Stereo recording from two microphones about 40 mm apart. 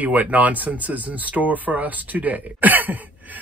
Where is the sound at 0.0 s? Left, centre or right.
Right.